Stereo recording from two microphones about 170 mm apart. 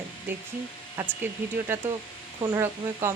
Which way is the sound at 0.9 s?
15° right (ahead or behind).